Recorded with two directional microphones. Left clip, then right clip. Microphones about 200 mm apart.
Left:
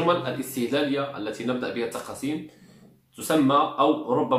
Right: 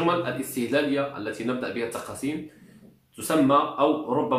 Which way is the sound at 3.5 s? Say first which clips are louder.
Left 1 dB; 10° left (ahead or behind).